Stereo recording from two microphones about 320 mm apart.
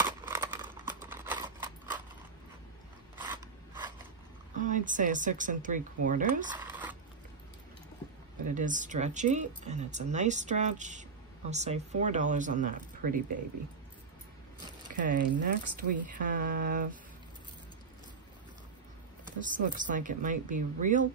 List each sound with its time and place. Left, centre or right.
0.0 s a sound: centre
1.0 s typewriter: centre
3.2 s mechanisms: centre
4.6 s speech: right; by 7.0 s centre
8.5 s speech: right
15.0 s speech: right
19.6 s speech: right